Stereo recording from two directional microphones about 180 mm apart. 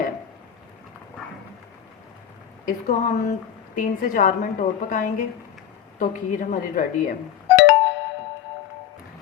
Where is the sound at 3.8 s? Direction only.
45° left (ahead or behind).